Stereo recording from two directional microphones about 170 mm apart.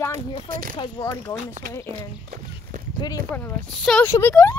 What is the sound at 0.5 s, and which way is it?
Speech, 55° right (ahead or behind).